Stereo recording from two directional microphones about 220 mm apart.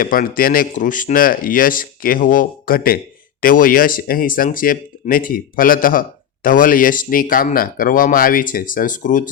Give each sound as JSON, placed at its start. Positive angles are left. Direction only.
{"t": 0.0, "sound": "speech", "side_deg": 40}